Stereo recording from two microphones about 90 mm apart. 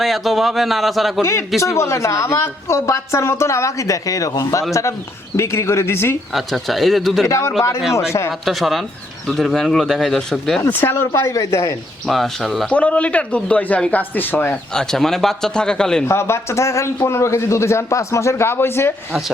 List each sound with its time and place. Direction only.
0.0 s speech: centre (ahead or behind)
1.2 s a woman's voice: 30° left (ahead or behind)
6.3 s speech: centre (ahead or behind)
7.3 s a woman's voice: 30° left (ahead or behind)
8.4 s speech: centre (ahead or behind)
10.6 s speech: 25° left (ahead or behind)
12.0 s speech: 5° left (ahead or behind)
12.7 s speech: 15° left (ahead or behind)
14.7 s speech: 5° left (ahead or behind)
16.0 s a woman's voice: 30° left (ahead or behind)